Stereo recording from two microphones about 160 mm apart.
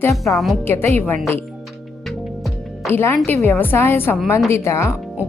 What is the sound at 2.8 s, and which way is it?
A woman's voice, 15° left (ahead or behind).